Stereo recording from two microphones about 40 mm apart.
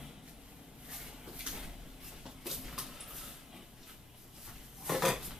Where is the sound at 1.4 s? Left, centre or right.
Centre.